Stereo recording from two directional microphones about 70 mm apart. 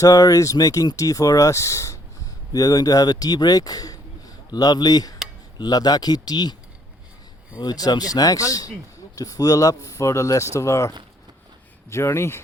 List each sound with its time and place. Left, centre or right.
0.0 s speech: left
2.5 s speech: left
7.6 s speech: left